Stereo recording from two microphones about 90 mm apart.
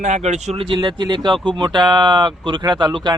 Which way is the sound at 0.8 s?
55° right (ahead or behind).